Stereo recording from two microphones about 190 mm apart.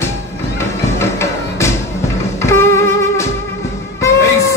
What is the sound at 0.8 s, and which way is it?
Music, 15° left (ahead or behind).